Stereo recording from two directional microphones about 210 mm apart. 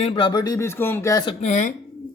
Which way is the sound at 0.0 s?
25° left (ahead or behind).